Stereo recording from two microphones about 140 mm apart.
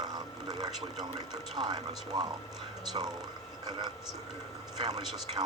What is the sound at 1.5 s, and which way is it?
Speech, 30° right (ahead or behind).